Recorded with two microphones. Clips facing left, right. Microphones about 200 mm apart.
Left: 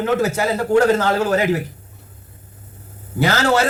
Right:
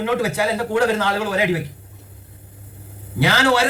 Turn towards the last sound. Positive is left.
turn(degrees=45)  # may be behind; listen again after turning